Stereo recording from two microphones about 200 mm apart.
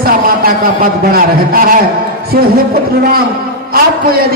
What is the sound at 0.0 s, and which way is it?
A man's voice, 45° right (ahead or behind).